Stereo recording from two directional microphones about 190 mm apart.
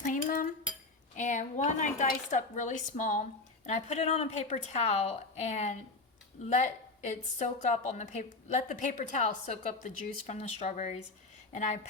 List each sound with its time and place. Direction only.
0.0 s cutlery: 45° left (ahead or behind)
1.1 s a woman's voice: 40° left (ahead or behind)